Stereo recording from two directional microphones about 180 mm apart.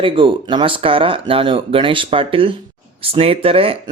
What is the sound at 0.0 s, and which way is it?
Speech, 25° right (ahead or behind).